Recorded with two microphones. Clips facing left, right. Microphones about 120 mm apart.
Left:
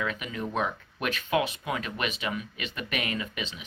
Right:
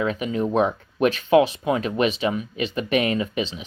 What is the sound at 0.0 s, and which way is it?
Speech, 30° right (ahead or behind).